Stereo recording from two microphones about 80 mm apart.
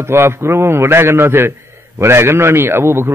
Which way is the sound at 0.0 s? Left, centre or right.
Right.